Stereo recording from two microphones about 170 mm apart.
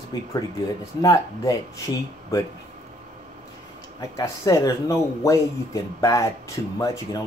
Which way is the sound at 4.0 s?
20° left (ahead or behind).